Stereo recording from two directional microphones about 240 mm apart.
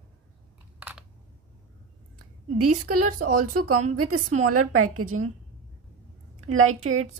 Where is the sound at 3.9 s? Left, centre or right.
Right.